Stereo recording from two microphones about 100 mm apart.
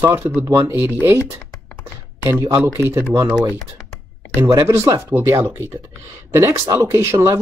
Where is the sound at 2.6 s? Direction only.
25° right (ahead or behind).